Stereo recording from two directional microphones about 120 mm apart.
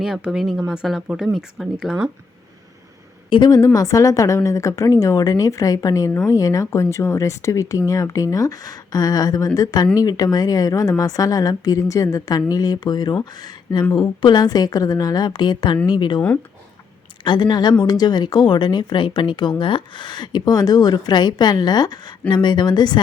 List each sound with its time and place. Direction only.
0.0 s speech: 5° right (ahead or behind)
3.2 s a woman's voice: 40° left (ahead or behind)
17.2 s speech: 40° left (ahead or behind)